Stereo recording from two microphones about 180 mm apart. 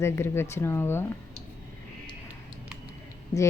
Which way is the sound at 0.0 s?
15° left (ahead or behind).